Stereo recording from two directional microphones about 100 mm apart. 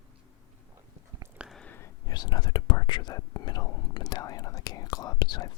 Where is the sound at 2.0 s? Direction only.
45° left (ahead or behind).